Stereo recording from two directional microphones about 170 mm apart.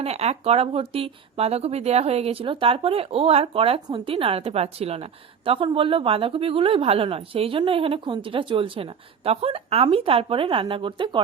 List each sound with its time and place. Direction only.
0.0 s a woman's voice: 35° right (ahead or behind)